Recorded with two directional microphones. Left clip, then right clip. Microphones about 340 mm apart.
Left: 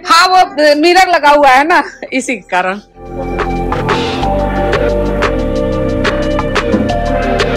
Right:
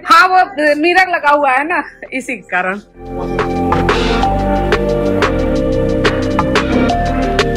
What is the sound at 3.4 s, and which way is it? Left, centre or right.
Music, centre.